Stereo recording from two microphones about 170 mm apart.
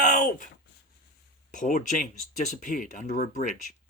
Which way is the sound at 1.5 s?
50° left (ahead or behind).